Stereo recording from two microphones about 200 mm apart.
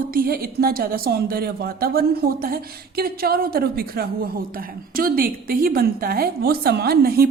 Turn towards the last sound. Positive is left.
turn(degrees=-50)  # may be behind; listen again after turning